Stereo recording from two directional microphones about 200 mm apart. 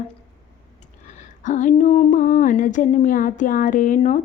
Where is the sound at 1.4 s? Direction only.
40° left (ahead or behind).